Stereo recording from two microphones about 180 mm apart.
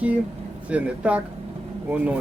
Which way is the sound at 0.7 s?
5° right (ahead or behind).